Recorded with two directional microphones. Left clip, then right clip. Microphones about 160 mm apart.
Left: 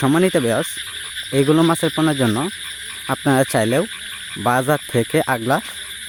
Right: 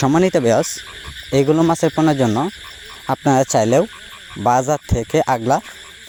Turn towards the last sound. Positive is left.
turn(degrees=-15)  # may be behind; listen again after turning